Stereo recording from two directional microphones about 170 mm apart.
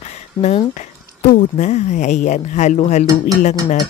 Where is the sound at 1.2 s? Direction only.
45° left (ahead or behind).